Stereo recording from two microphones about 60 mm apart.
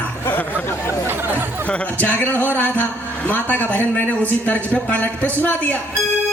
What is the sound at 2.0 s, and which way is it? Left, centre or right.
A man's voice, left.